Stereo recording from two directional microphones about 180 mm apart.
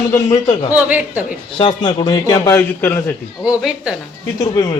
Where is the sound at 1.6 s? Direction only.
25° left (ahead or behind).